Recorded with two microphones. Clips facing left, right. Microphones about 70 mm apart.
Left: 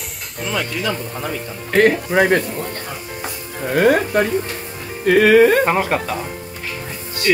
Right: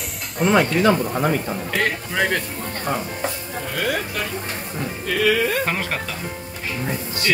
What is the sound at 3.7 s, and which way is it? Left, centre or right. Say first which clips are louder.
Speech: left 10 dB; left.